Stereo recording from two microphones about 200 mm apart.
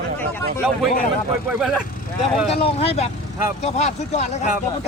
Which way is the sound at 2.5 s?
30° left (ahead or behind).